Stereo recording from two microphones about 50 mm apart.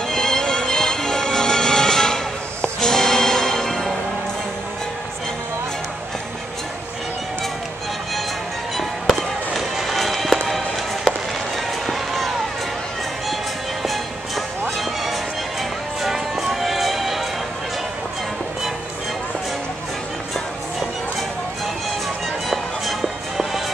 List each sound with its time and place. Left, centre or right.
0.1 s music: centre
8.7 s music: centre
11.8 s run: centre
16.0 s music: centre
22.5 s music: centre